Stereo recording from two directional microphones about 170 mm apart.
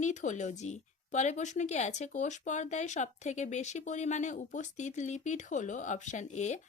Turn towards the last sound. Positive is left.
turn(degrees=45)  # may be behind; listen again after turning